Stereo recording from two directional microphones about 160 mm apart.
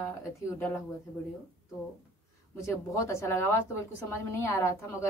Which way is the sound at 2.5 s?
20° left (ahead or behind).